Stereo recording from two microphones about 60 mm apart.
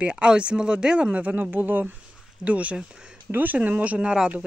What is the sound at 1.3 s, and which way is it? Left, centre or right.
Speech, right.